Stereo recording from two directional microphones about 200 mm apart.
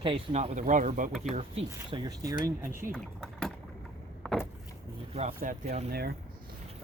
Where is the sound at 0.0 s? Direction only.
25° right (ahead or behind).